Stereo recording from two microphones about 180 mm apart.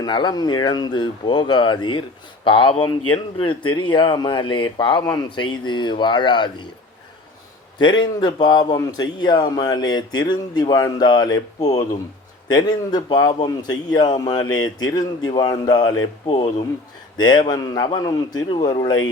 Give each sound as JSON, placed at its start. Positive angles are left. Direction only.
{"t": 0.0, "sound": "speech", "side_deg": 25}
{"t": 7.8, "sound": "speech", "side_deg": 25}